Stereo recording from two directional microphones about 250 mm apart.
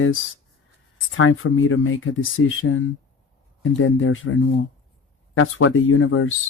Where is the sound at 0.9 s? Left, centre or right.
Left.